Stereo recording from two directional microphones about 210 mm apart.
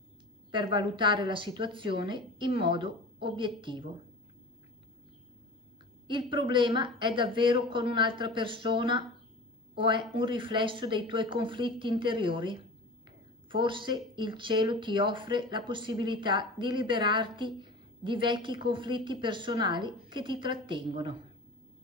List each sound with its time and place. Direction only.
0.5 s speech: 25° right (ahead or behind)
6.0 s speech: 25° right (ahead or behind)